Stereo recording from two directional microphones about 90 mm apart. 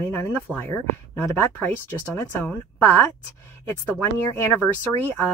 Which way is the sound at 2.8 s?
25° left (ahead or behind).